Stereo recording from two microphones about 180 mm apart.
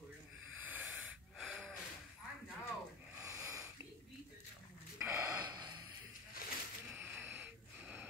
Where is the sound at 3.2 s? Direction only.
20° right (ahead or behind).